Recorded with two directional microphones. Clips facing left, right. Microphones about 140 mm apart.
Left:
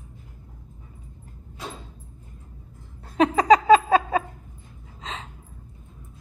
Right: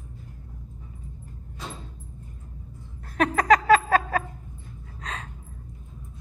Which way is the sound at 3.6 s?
20° left (ahead or behind).